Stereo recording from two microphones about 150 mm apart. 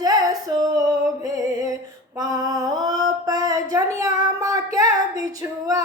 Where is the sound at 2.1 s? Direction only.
25° right (ahead or behind).